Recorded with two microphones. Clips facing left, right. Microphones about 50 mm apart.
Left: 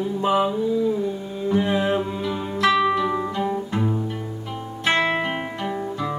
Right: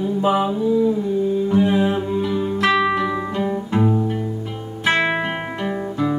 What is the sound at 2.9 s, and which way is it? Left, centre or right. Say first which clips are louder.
Music: right 1 dB; right.